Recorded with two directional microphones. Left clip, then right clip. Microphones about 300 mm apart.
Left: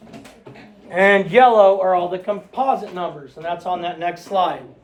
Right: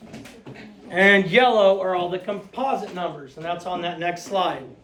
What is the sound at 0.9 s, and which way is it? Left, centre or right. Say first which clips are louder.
Speech: left 2 dB; centre.